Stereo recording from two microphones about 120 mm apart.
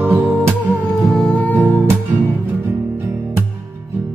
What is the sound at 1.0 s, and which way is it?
Music, 5° left (ahead or behind).